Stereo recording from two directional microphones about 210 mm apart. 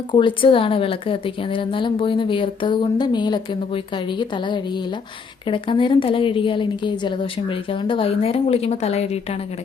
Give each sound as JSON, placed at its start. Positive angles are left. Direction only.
{"t": 0.1, "sound": "speech", "side_deg": 25}